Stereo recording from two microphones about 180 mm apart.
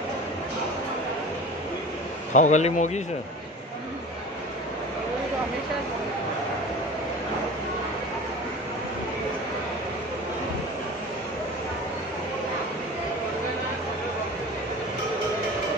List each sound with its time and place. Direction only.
2.3 s speech: 40° left (ahead or behind)